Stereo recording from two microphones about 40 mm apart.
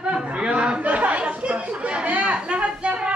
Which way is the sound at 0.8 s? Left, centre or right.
Right.